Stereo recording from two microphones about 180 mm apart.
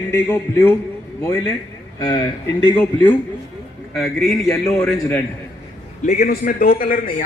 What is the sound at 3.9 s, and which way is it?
Speech, centre (ahead or behind).